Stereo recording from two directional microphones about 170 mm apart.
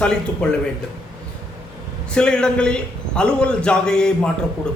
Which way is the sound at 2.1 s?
5° left (ahead or behind).